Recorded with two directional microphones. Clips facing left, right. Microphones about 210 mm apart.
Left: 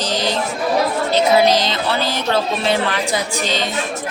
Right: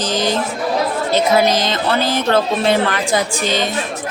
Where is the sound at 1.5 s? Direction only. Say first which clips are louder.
Even; 50° right (ahead or behind).